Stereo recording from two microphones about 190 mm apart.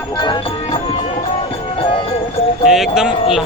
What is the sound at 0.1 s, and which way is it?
Music, 25° left (ahead or behind).